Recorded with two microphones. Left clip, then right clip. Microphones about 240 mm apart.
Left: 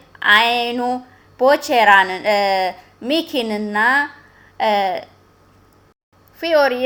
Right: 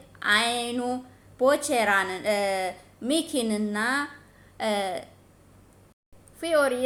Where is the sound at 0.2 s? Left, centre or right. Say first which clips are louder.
Left 10 dB; left.